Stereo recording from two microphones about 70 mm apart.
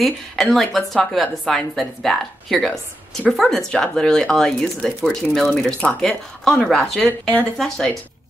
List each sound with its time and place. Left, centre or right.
0.0 s a woman's voice: centre
7.1 s speech: left
7.5 s a woman's voice: centre